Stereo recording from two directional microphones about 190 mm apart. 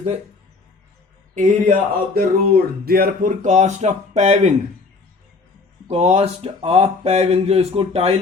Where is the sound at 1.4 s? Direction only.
45° right (ahead or behind).